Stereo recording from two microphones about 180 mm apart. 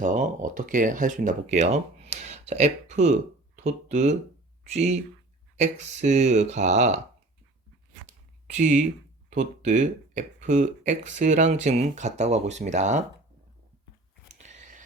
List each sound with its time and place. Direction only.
0.0 s speech: 45° right (ahead or behind)
8.5 s speech: 45° right (ahead or behind)
14.3 s whispering: 40° right (ahead or behind)